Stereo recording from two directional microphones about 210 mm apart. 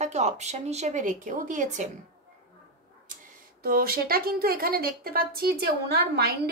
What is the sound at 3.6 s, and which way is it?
A woman's voice, 45° right (ahead or behind).